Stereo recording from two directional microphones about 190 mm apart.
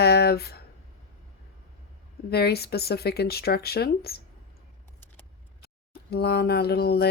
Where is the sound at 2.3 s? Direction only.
55° left (ahead or behind).